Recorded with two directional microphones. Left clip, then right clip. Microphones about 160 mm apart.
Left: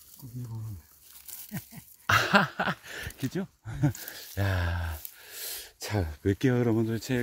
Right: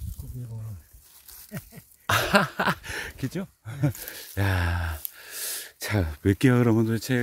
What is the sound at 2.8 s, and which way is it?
Speech, 45° right (ahead or behind).